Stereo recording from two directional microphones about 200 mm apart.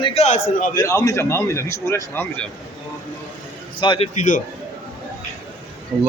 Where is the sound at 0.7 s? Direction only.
15° left (ahead or behind).